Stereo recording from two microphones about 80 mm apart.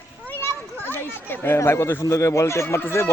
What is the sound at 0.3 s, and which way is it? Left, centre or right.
Children playing, left.